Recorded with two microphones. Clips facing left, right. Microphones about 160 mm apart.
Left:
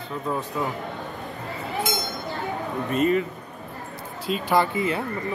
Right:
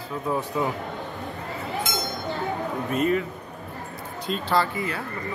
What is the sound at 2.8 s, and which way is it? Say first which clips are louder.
Speech: left 2 dB; centre (ahead or behind).